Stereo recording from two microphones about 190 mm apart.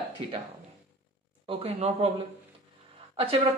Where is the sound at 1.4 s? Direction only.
30° right (ahead or behind).